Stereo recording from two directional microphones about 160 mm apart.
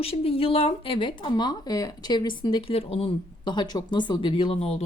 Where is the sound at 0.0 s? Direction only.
35° left (ahead or behind).